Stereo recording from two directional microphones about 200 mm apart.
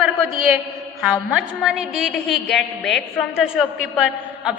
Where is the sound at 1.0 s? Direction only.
5° right (ahead or behind).